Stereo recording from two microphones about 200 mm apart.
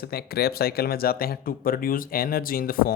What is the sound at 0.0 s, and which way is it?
Speech, 50° left (ahead or behind).